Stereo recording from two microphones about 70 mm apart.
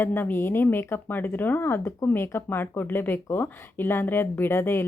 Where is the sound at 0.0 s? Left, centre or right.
Left.